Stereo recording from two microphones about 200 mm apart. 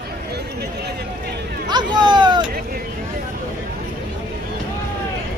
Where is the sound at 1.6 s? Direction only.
20° right (ahead or behind).